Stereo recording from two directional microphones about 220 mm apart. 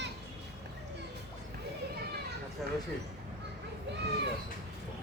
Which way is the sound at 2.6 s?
Centre (ahead or behind).